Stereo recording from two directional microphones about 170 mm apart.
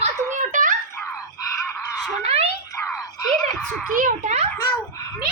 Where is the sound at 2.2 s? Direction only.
35° right (ahead or behind).